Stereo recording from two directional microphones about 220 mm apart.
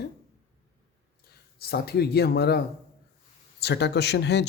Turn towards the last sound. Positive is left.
turn(degrees=50)  # may be behind; listen again after turning